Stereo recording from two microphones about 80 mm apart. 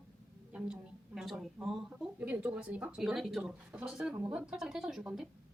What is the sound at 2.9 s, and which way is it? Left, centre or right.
A woman's voice, centre.